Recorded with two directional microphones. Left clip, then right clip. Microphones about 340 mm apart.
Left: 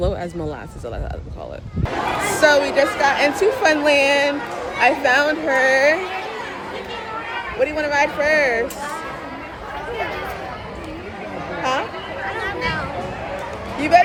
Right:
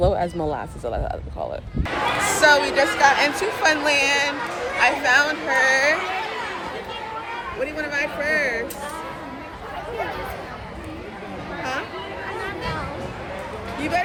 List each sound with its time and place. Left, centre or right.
0.0 s speech: centre
2.4 s a woman's voice: centre
7.6 s speech: centre
13.9 s speech: centre